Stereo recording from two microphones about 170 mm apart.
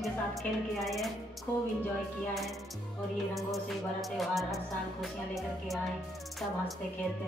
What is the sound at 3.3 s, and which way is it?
Music, centre (ahead or behind).